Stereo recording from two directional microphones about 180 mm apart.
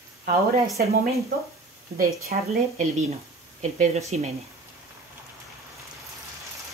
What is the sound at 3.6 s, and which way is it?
Speech, 40° right (ahead or behind).